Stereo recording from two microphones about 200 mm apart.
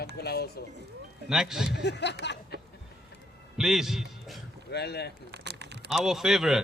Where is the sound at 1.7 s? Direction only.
60° left (ahead or behind).